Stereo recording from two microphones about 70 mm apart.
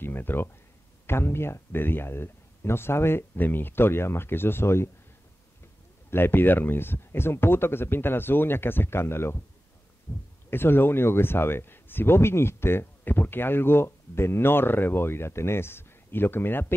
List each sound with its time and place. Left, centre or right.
0.0 s speech: left
6.0 s speech: left
10.5 s speech: left